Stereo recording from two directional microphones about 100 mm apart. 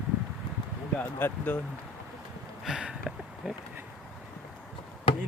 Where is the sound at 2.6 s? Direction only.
5° right (ahead or behind).